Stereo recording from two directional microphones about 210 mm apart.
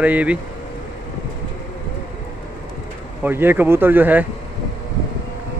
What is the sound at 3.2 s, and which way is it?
Speech, 10° right (ahead or behind).